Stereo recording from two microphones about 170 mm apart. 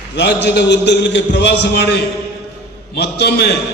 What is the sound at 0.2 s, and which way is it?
A man's voice, 80° left.